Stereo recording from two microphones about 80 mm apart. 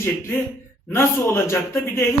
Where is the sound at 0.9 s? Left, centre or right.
Left.